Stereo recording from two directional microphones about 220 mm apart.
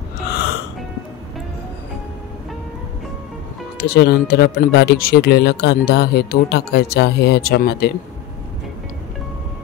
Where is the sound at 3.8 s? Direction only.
45° left (ahead or behind).